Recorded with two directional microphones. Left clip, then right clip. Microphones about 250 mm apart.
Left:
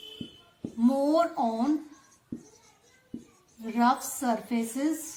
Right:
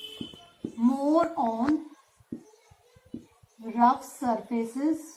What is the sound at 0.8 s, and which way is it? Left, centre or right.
Speech, left.